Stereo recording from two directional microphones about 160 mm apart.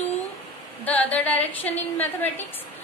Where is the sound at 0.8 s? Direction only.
10° left (ahead or behind).